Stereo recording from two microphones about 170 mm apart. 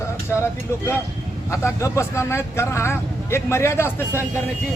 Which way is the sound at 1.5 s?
15° left (ahead or behind).